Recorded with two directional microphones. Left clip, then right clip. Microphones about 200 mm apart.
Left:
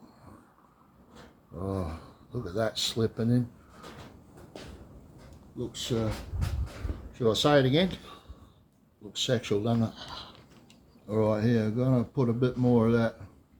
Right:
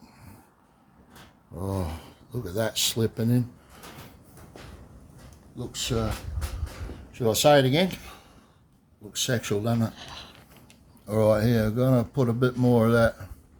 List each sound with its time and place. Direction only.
1.5 s filing: 35° right (ahead or behind)
2.3 s speech: 35° right (ahead or behind)
7.1 s speech: 40° right (ahead or behind)
9.9 s a sound: 10° right (ahead or behind)
11.0 s speech: 50° right (ahead or behind)